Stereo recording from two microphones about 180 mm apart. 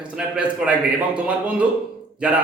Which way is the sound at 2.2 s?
5° right (ahead or behind).